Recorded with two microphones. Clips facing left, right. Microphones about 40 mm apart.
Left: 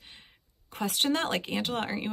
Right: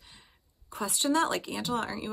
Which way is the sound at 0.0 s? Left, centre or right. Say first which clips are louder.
Left 3 dB; left.